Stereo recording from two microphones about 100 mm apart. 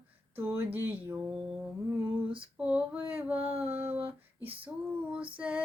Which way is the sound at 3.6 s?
20° right (ahead or behind).